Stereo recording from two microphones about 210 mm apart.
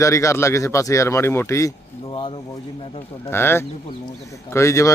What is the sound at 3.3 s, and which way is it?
Speech, 10° left (ahead or behind).